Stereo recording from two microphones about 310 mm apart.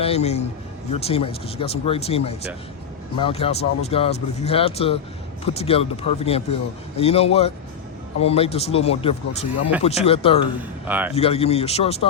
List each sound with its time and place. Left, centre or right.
0.0 s a man's voice: centre
10.6 s a man's voice: centre
11.1 s a man's voice: centre